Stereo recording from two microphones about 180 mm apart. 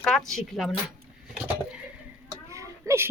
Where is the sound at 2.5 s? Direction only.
15° right (ahead or behind).